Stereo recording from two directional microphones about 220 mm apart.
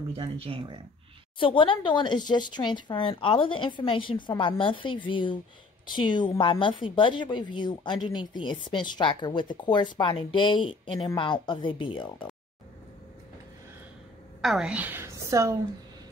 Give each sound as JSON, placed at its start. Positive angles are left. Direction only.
{"t": 0.1, "sound": "speech", "side_deg": -25}
{"t": 1.4, "sound": "a woman's voice", "side_deg": 20}
{"t": 14.4, "sound": "a woman's voice", "side_deg": 0}